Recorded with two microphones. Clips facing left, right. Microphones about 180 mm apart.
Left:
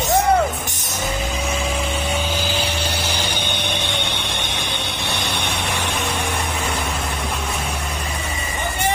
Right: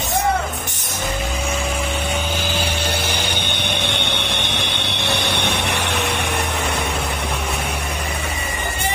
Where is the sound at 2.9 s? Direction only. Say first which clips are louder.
Right 1 dB; 60° right (ahead or behind).